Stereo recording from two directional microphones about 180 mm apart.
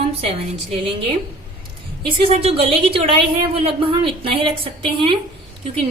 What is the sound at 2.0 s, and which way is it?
A woman's voice, 30° right (ahead or behind).